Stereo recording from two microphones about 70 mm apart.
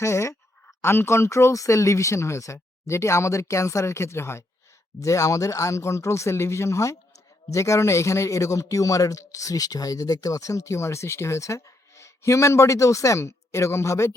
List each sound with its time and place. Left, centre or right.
0.0 s speech: left
4.9 s speech: left